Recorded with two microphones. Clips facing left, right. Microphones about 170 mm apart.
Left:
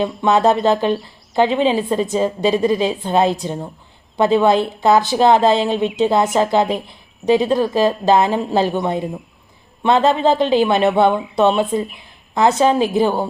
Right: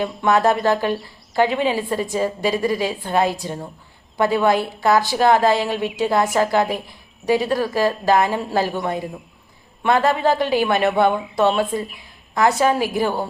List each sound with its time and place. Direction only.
0.2 s speech: 25° left (ahead or behind)
11.1 s speech: centre (ahead or behind)
11.7 s speech: 25° left (ahead or behind)